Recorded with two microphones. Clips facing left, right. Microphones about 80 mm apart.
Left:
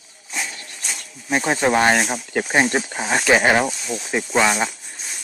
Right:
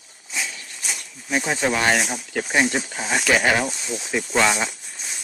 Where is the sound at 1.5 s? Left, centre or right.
Left.